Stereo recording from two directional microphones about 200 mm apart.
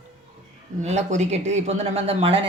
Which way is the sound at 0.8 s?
35° right (ahead or behind).